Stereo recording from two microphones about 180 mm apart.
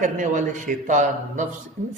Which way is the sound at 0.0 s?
45° right (ahead or behind).